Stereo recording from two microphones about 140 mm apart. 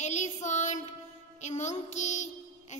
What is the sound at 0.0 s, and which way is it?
Child singing, 55° left (ahead or behind).